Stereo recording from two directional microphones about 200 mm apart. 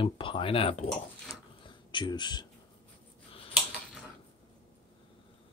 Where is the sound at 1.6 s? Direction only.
25° left (ahead or behind).